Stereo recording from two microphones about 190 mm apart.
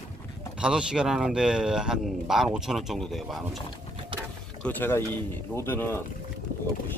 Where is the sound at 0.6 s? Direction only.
5° right (ahead or behind).